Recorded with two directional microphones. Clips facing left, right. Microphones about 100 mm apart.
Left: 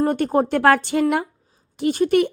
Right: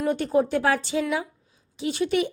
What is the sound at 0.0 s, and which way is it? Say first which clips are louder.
A child's voice: left 4 dB; 50° left (ahead or behind).